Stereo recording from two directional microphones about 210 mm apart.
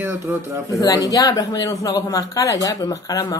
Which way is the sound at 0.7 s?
15° left (ahead or behind).